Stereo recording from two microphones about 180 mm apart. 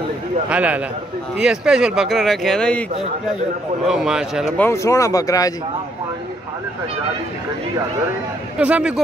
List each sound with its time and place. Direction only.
0.5 s speech: 5° right (ahead or behind)
3.8 s speech: 5° right (ahead or behind)
4.6 s speech: 15° left (ahead or behind)
8.5 s speech: 5° right (ahead or behind)